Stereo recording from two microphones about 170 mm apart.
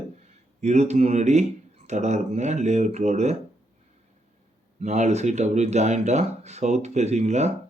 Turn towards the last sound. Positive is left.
turn(degrees=-40)  # may be behind; listen again after turning